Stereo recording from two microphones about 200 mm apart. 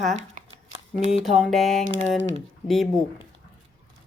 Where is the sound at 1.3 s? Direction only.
Centre (ahead or behind).